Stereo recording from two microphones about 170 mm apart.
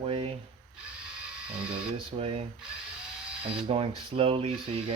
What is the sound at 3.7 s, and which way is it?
Speech, 35° right (ahead or behind).